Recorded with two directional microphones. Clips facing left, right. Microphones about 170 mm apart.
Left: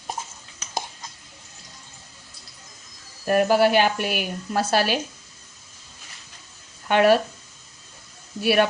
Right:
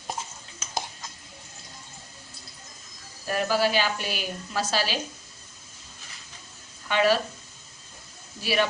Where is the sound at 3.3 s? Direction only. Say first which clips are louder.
Left 7 dB; 55° left (ahead or behind).